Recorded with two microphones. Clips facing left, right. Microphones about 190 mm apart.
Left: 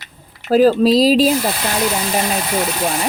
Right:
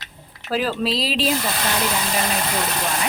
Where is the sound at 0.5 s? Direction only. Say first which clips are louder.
Left 11 dB; 40° left (ahead or behind).